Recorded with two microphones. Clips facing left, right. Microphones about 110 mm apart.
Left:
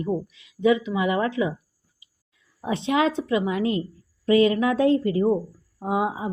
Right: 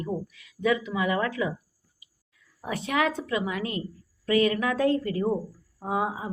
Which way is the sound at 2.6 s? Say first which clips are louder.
Left 4 dB; 25° left (ahead or behind).